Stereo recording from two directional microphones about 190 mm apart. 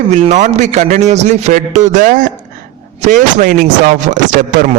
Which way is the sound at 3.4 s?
45° right (ahead or behind).